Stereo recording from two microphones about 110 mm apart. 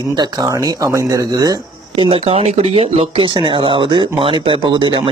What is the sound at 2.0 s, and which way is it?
Speech, 60° right (ahead or behind).